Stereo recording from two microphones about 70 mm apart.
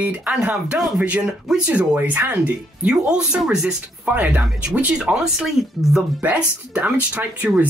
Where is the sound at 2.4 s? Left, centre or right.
Centre.